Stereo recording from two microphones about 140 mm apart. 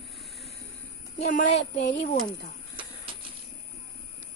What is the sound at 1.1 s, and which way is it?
Speech, 55° left (ahead or behind).